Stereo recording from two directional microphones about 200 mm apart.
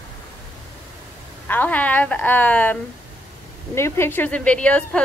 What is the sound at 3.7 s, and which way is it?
Speech, 10° left (ahead or behind).